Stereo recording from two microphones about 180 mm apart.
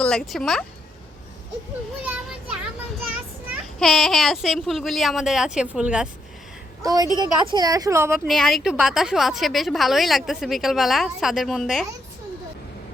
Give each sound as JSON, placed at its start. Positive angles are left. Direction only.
{"t": 0.0, "sound": "a woman's voice", "side_deg": 0}
{"t": 2.0, "sound": "a sound", "side_deg": -5}
{"t": 3.8, "sound": "a woman's voice", "side_deg": 0}
{"t": 6.8, "sound": "a woman's voice", "side_deg": -20}
{"t": 8.3, "sound": "a woman's voice", "side_deg": 0}